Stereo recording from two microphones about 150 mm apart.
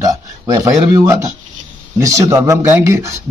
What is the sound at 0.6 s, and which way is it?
A man's voice, 25° right (ahead or behind).